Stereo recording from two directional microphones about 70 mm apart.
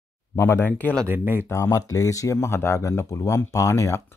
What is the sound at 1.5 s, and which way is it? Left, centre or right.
Speech, left.